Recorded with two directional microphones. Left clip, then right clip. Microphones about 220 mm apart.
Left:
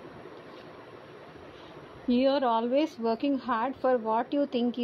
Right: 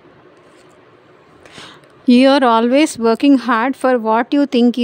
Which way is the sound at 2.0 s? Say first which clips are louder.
Right 14 dB; 50° right (ahead or behind).